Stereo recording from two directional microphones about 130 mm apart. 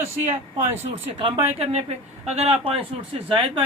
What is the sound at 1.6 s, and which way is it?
A man's voice, 55° right (ahead or behind).